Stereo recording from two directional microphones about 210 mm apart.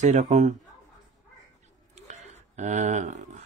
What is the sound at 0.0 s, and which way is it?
Speech, 35° right (ahead or behind).